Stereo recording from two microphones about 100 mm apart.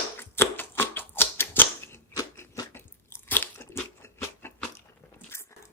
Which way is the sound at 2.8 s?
20° left (ahead or behind).